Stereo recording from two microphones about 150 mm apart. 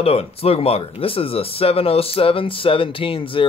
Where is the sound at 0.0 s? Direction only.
40° left (ahead or behind).